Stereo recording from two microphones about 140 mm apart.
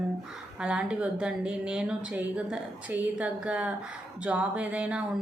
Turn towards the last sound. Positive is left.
turn(degrees=-10)  # may be behind; listen again after turning